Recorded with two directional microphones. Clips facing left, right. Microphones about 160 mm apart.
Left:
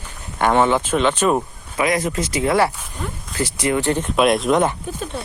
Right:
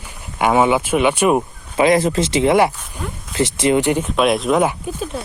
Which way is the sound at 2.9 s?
5° right (ahead or behind).